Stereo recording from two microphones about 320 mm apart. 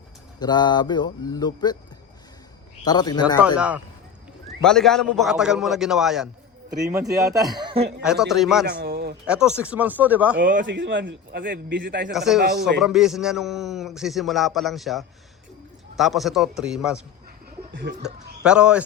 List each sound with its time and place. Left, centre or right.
0.3 s speech: centre
2.8 s speech: centre
3.4 s a man's voice: centre
7.5 s speech: centre
8.0 s a man's voice: centre
8.6 s a sound: right
9.2 s a man's voice: centre
10.3 s a man's voice: right
12.1 s a man's voice: centre
12.4 s a man's voice: right
12.8 s a man's voice: centre
17.7 s a man's voice: right
18.0 s a man's voice: centre